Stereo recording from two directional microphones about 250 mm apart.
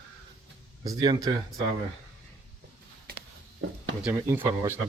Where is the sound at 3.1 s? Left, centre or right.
Right.